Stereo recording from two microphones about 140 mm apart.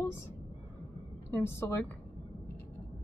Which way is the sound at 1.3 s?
20° left (ahead or behind).